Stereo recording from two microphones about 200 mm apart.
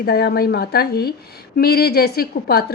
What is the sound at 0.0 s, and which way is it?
A woman's voice, 50° left (ahead or behind).